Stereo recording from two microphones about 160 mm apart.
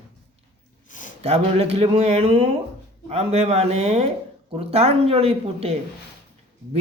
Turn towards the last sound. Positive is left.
turn(degrees=-35)  # may be behind; listen again after turning